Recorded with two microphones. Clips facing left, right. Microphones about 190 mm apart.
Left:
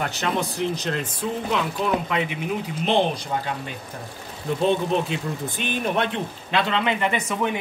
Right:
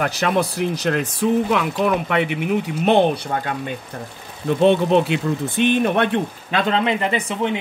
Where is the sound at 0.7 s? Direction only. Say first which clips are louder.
Right 6 dB; 65° right (ahead or behind).